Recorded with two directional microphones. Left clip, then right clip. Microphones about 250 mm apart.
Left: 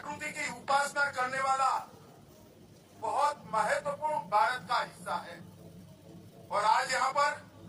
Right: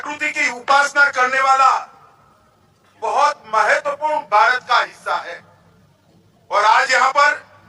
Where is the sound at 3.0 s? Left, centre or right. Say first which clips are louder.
Right 13 dB; right.